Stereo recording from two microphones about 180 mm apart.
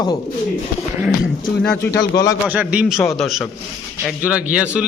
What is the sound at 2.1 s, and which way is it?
Speech, 20° left (ahead or behind).